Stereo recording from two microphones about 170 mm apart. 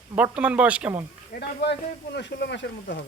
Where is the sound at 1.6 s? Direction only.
85° left.